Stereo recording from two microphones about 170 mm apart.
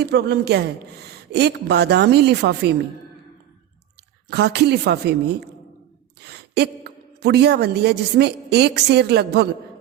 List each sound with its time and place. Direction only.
0.0 s a woman's voice: 75° right (ahead or behind)
4.3 s a woman's voice: 75° right (ahead or behind)